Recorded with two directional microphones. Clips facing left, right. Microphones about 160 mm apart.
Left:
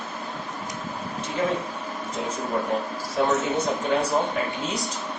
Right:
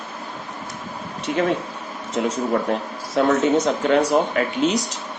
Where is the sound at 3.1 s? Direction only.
90° right.